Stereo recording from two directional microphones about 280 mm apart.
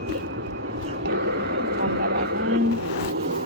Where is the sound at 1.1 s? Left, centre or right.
Right.